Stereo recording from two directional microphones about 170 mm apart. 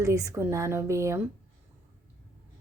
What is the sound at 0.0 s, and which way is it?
A woman's voice, 20° right (ahead or behind).